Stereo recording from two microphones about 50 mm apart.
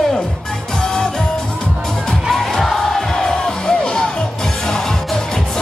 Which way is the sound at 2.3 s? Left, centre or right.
Centre.